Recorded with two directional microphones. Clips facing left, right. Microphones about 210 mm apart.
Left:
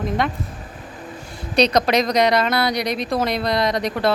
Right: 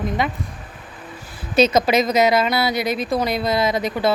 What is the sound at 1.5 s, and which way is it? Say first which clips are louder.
Speech: right 1 dB; 5° right (ahead or behind).